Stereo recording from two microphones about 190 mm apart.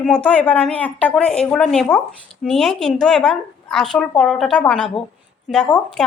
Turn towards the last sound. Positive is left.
turn(degrees=5)  # may be behind; listen again after turning